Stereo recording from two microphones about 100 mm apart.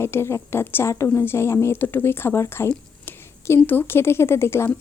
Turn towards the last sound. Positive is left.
turn(degrees=25)  # may be behind; listen again after turning